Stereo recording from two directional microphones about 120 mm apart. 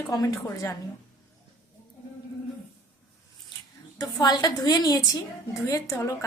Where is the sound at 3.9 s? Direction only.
35° left (ahead or behind).